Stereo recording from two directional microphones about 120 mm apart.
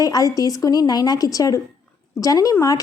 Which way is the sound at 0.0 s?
30° left (ahead or behind).